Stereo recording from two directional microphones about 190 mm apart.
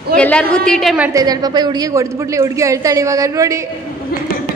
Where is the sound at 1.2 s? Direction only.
20° right (ahead or behind).